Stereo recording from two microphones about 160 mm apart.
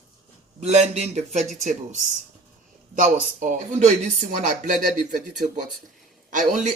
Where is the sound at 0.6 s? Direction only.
45° right (ahead or behind).